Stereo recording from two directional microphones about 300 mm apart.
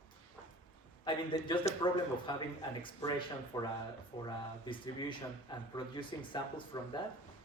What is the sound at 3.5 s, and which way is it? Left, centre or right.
Speech, centre.